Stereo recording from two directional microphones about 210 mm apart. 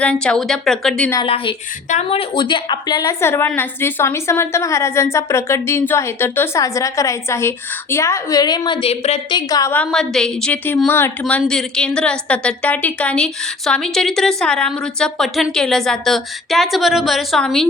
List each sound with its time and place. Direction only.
0.0 s a woman's voice: 5° left (ahead or behind)
1.1 s speech: 25° left (ahead or behind)
9.5 s a woman's voice: 15° left (ahead or behind)